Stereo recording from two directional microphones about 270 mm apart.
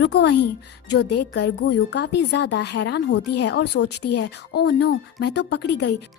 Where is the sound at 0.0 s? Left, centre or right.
Left.